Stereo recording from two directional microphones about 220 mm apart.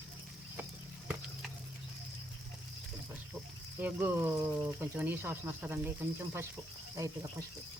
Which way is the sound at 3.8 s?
5° right (ahead or behind).